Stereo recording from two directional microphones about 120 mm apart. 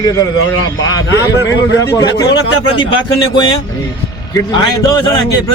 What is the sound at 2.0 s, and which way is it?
Speech, 30° left (ahead or behind).